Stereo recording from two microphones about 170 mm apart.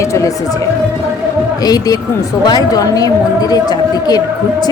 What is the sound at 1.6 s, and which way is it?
Speech, 20° left (ahead or behind).